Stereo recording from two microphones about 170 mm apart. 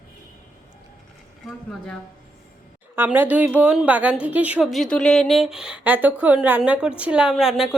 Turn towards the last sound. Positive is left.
turn(degrees=0)  # may be behind; listen again after turning